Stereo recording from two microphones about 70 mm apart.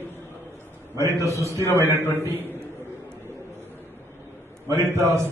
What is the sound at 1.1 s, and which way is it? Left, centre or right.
Speech, right.